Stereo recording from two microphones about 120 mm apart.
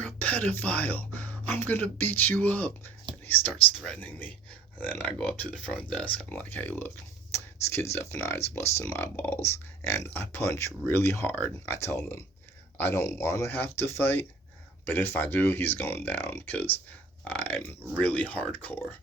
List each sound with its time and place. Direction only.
0.0 s speech: 15° left (ahead or behind)